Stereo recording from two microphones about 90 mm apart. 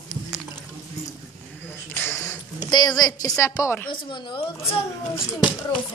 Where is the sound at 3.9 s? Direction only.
65° left (ahead or behind).